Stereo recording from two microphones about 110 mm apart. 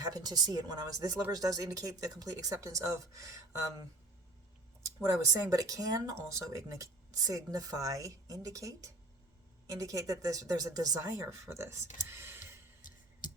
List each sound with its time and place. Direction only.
0.0 s speech: 35° right (ahead or behind)
5.2 s speech: 30° right (ahead or behind)
12.0 s music: 25° right (ahead or behind)